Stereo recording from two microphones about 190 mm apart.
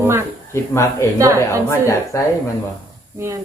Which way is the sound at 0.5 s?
15° left (ahead or behind).